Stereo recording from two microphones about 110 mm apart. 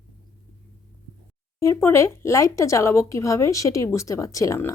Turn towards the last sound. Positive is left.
turn(degrees=30)  # may be behind; listen again after turning